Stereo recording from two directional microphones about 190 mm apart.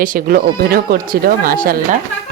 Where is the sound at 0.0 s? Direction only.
45° right (ahead or behind).